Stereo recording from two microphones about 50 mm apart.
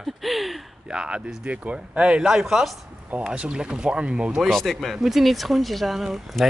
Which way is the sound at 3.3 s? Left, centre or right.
Centre.